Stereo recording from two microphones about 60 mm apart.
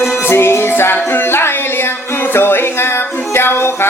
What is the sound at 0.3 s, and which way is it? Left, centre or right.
Music, left.